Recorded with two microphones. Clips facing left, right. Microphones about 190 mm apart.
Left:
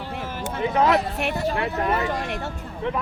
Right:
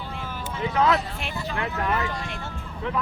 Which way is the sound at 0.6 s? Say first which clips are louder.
Left 3 dB; 20° left (ahead or behind).